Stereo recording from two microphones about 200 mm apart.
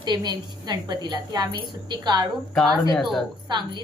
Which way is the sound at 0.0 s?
20° right (ahead or behind).